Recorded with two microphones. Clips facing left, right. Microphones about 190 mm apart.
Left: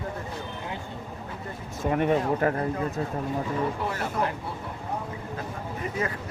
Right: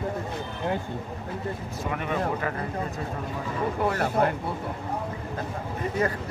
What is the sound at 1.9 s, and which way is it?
Speech, 40° left (ahead or behind).